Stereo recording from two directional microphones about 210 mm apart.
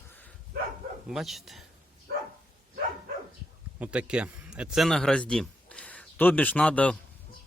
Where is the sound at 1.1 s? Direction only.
Centre (ahead or behind).